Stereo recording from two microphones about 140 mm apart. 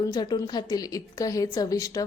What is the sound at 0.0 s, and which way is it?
A woman's voice, 25° left (ahead or behind).